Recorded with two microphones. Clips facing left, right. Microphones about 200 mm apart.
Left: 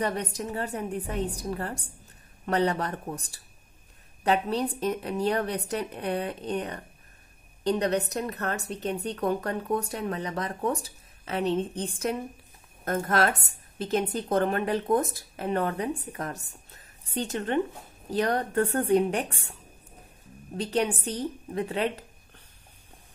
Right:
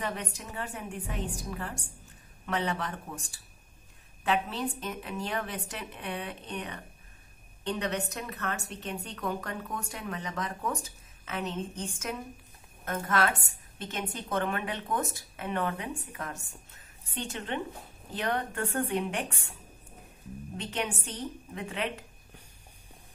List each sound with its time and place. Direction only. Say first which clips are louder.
0.0 s a woman's voice: left 7 dB; 40° left (ahead or behind)
20.5 s a woman's voice: left 8 dB; 35° left (ahead or behind)